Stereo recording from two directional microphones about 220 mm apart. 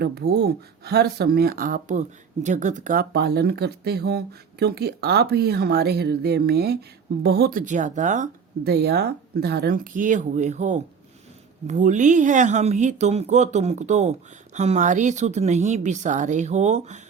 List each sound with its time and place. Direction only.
0.0 s speech: 45° right (ahead or behind); by 17.0 s 30° right (ahead or behind)